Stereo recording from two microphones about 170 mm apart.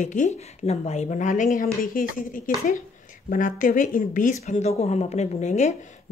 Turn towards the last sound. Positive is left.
turn(degrees=45)  # may be behind; listen again after turning